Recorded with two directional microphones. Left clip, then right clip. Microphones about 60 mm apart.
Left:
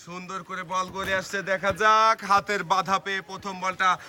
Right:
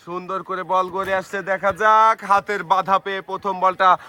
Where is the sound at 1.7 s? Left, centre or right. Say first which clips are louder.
Right 5 dB; centre.